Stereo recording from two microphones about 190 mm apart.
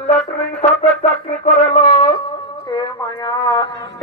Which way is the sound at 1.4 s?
30° left (ahead or behind).